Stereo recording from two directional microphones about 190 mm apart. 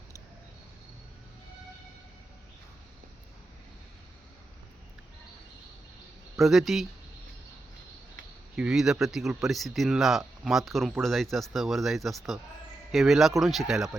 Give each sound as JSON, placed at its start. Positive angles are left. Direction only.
{"t": 6.3, "sound": "speech", "side_deg": 0}
{"t": 8.5, "sound": "speech", "side_deg": -5}